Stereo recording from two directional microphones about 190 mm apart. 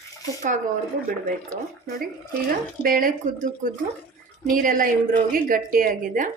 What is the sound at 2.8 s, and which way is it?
Speech, 50° right (ahead or behind).